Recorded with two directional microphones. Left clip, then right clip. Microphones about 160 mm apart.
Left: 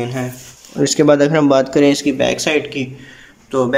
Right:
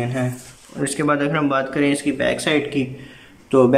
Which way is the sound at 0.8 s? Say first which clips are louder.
Left 8 dB; 25° left (ahead or behind).